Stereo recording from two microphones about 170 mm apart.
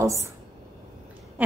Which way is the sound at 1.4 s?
10° right (ahead or behind).